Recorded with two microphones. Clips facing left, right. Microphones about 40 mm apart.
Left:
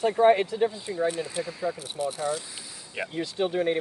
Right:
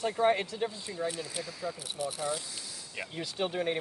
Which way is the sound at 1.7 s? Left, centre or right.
Centre.